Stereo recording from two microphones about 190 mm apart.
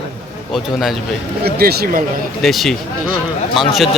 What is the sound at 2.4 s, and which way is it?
Speech, centre (ahead or behind).